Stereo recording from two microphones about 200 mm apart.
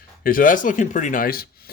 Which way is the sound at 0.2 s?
45° left (ahead or behind).